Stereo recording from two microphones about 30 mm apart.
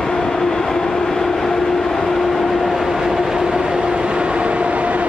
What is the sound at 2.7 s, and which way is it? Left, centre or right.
Train, centre.